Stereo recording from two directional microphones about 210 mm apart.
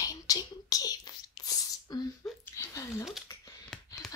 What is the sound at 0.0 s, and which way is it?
Whispering, 15° left (ahead or behind).